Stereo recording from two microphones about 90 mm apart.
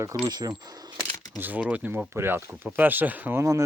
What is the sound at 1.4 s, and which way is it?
Speech, 15° right (ahead or behind).